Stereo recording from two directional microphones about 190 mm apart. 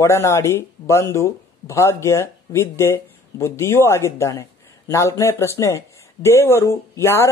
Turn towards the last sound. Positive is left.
turn(degrees=15)  # may be behind; listen again after turning